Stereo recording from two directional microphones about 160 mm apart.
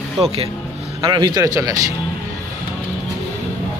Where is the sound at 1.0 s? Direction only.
25° right (ahead or behind).